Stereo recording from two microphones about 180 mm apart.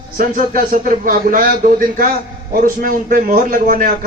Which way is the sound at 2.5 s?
55° right (ahead or behind).